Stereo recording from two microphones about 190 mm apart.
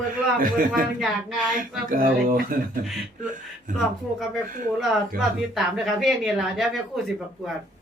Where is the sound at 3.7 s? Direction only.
45° right (ahead or behind).